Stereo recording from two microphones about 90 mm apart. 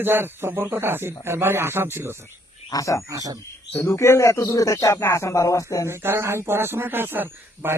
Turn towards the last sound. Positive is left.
turn(degrees=-25)  # may be behind; listen again after turning